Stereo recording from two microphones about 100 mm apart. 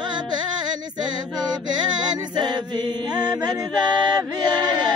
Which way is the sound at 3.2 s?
45° right (ahead or behind).